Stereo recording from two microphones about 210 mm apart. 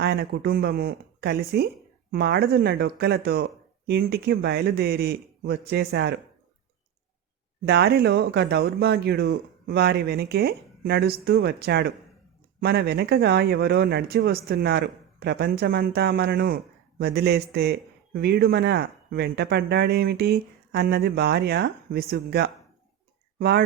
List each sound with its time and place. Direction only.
0.0 s speech: 50° right (ahead or behind)
7.6 s speech: 50° right (ahead or behind)